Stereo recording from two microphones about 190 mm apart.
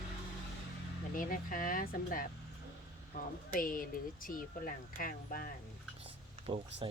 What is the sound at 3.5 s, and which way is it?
Speech, 45° left (ahead or behind).